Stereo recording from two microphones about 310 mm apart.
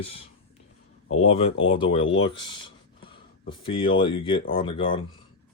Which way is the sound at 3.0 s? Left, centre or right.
Centre.